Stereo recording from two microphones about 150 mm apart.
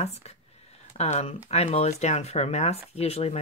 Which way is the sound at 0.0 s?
45° left (ahead or behind).